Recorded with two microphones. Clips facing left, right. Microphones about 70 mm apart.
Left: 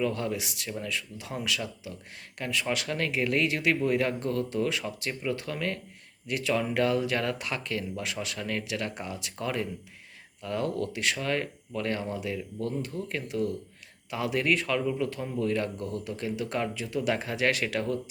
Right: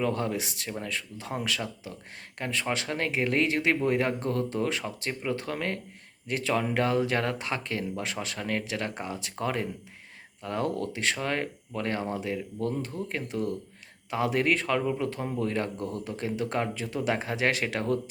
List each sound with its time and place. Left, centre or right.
0.0 s speech: right